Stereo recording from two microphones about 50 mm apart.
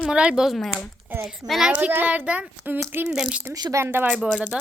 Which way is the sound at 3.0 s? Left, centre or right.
Centre.